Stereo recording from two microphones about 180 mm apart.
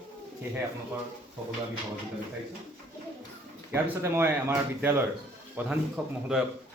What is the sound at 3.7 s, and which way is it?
Speech, 15° right (ahead or behind).